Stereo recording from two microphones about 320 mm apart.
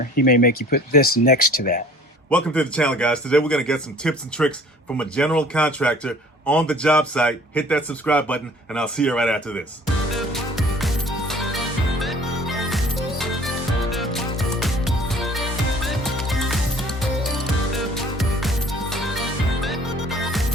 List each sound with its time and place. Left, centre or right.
0.2 s speech: left
2.3 s a man's voice: centre
10.3 s music: centre
12.5 s music: centre